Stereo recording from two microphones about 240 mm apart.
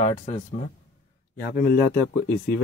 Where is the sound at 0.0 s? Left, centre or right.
Left.